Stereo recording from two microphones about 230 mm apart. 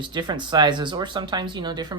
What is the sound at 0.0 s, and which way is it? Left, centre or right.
Speech, centre.